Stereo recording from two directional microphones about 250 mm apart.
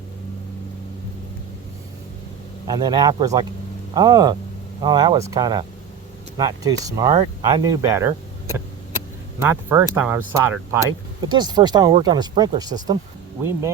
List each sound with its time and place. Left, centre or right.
2.6 s speech: centre
9.4 s speech: centre